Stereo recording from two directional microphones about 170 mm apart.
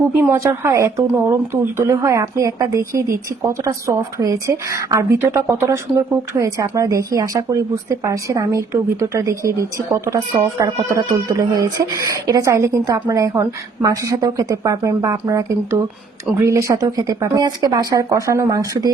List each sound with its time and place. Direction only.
0.2 s speech: 15° right (ahead or behind)